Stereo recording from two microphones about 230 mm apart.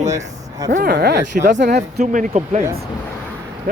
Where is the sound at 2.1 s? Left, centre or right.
Right.